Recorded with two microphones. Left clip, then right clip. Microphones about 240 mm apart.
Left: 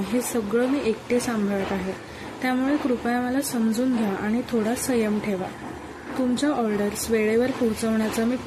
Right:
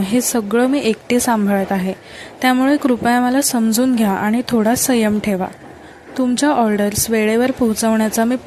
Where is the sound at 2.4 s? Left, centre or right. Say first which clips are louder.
Right 9 dB; right.